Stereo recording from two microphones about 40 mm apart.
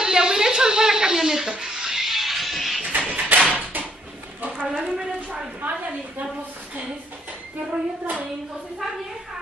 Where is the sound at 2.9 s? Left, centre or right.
Right.